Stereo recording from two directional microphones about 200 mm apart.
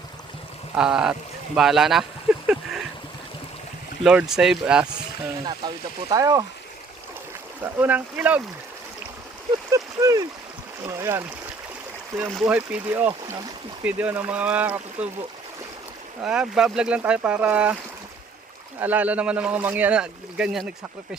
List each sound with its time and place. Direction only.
0.8 s speech: 5° right (ahead or behind)
2.3 s a sound: 5° right (ahead or behind)
4.0 s speech: 5° right (ahead or behind)
5.5 s speech: 20° right (ahead or behind)
7.6 s speech: 10° right (ahead or behind)
9.7 s speech: 15° right (ahead or behind)
12.3 s speech: 5° right (ahead or behind)
16.2 s speech: 5° right (ahead or behind)
18.8 s speech: 10° right (ahead or behind)